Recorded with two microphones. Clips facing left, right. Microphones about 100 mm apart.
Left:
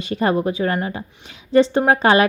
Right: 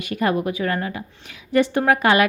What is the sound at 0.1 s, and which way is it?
A woman's voice, 30° left (ahead or behind).